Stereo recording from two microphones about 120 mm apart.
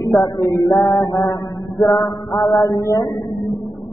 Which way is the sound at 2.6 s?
35° left (ahead or behind).